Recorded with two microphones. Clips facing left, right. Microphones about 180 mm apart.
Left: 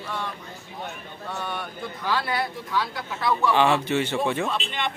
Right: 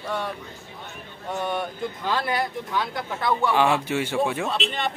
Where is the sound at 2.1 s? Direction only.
20° right (ahead or behind).